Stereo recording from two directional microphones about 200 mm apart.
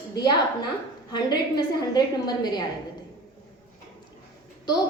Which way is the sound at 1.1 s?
20° left (ahead or behind).